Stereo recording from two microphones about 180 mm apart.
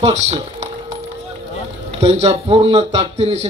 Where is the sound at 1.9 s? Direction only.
35° right (ahead or behind).